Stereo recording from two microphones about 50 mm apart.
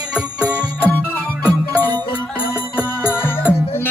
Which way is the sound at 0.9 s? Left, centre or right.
Left.